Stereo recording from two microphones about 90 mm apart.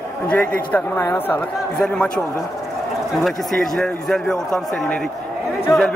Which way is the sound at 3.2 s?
5° left (ahead or behind).